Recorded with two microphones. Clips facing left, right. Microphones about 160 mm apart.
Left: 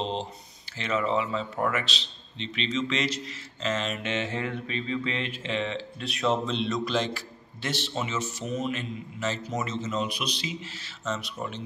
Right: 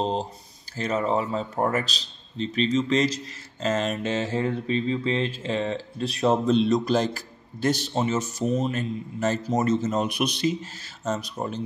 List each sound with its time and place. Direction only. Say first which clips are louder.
0.0 s mantra: right 5 dB; 40° right (ahead or behind)
10.6 s mantra: right 3 dB; 40° right (ahead or behind)